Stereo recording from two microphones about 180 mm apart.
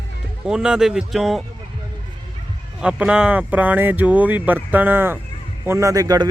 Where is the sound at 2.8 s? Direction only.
5° right (ahead or behind).